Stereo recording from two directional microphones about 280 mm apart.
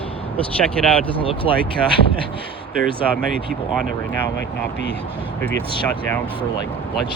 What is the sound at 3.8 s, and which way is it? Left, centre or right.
Speech, right.